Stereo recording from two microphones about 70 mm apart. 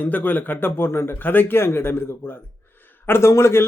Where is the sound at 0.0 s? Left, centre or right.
Left.